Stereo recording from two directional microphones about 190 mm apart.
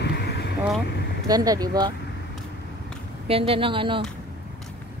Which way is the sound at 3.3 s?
30° right (ahead or behind).